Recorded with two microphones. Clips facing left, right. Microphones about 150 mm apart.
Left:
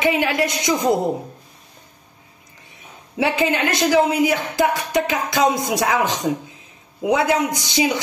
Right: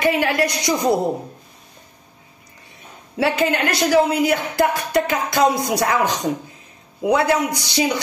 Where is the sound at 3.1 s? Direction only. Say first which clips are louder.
Even; 15° left (ahead or behind).